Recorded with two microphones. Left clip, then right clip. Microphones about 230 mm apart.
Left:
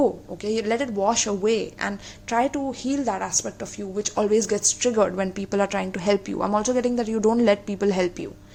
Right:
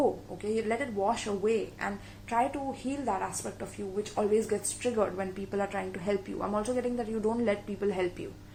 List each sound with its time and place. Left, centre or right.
0.4 s a woman's voice: left